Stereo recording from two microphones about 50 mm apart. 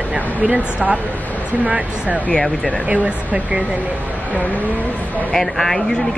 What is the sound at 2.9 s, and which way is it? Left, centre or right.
Speech, right.